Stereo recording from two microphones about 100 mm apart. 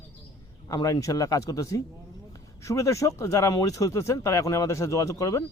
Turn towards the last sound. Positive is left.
turn(degrees=35)  # may be behind; listen again after turning